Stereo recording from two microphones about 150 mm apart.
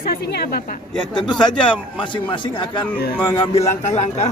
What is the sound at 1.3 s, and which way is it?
Speech, 5° left (ahead or behind).